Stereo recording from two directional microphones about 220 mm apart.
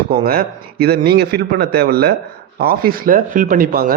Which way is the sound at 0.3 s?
45° right (ahead or behind).